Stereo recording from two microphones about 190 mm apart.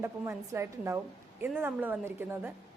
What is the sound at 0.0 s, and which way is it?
A woman's voice, 15° right (ahead or behind).